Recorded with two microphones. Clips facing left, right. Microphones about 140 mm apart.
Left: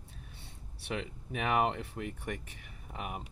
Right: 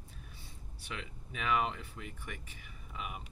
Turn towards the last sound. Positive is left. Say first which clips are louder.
# left 3 dB
turn(degrees=60)  # may be behind; listen again after turning